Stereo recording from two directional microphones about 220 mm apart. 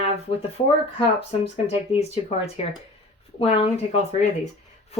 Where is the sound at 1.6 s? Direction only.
30° left (ahead or behind).